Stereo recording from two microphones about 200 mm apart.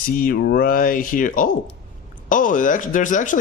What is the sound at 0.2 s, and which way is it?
Speech, 45° left (ahead or behind).